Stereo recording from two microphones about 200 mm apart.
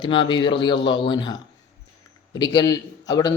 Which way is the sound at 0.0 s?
25° left (ahead or behind).